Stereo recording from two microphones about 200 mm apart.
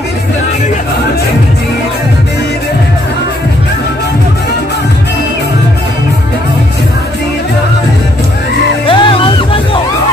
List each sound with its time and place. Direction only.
8.8 s music: 25° left (ahead or behind)